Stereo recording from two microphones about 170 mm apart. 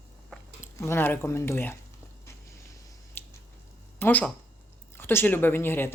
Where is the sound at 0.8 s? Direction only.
15° left (ahead or behind).